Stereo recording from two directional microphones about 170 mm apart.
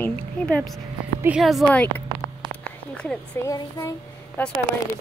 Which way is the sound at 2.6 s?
5° left (ahead or behind).